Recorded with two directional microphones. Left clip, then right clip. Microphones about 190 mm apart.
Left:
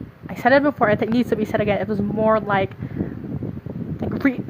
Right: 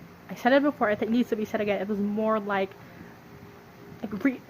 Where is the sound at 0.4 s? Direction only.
35° left (ahead or behind).